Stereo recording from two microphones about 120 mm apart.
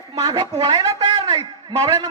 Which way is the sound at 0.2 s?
35° right (ahead or behind).